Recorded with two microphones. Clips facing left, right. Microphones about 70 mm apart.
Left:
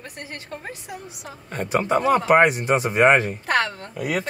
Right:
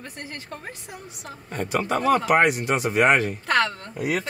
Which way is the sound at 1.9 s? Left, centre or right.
Centre.